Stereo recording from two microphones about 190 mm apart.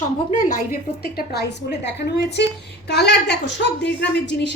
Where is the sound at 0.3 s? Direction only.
45° left (ahead or behind).